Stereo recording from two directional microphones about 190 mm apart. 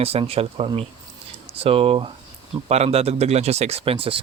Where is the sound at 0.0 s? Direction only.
30° right (ahead or behind).